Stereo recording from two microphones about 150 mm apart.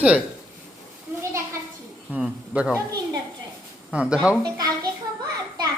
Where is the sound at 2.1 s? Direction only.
5° right (ahead or behind).